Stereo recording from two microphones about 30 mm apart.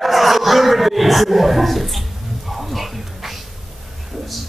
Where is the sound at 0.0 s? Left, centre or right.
Centre.